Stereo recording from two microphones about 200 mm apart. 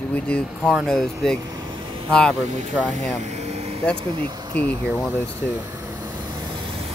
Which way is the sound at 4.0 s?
25° right (ahead or behind).